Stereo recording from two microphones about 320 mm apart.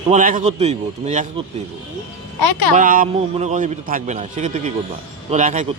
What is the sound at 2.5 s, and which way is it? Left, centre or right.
Speech, left.